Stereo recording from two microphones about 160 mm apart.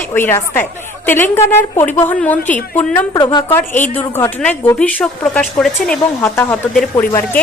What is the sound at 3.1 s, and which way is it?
Speech, 25° left (ahead or behind).